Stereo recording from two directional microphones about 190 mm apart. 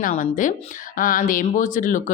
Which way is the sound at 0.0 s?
45° left (ahead or behind).